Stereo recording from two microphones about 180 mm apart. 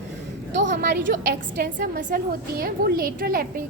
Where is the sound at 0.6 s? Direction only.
70° right (ahead or behind).